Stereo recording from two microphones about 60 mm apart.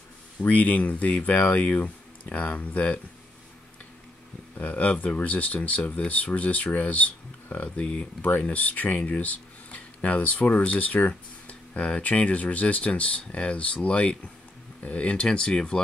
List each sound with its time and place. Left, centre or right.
0.4 s speech: left
4.6 s speech: left